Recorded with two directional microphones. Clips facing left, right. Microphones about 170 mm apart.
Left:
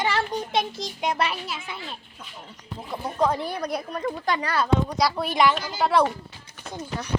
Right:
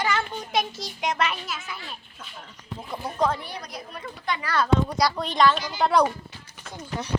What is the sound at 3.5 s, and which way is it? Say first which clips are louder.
Speech: left 9 dB; 60° left (ahead or behind).